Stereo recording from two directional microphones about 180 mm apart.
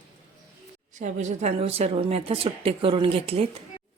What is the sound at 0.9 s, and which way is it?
A woman's voice, 40° right (ahead or behind).